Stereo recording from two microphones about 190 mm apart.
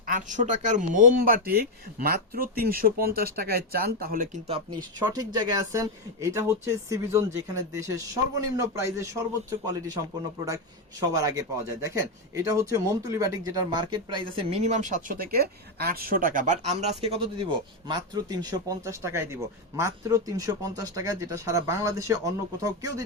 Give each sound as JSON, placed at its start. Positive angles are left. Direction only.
{"t": 0.1, "sound": "a man's voice", "side_deg": -40}
{"t": 4.4, "sound": "speech", "side_deg": -30}
{"t": 11.1, "sound": "speech", "side_deg": -15}